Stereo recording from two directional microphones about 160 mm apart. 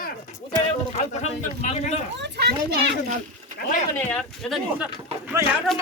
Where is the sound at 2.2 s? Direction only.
90° right.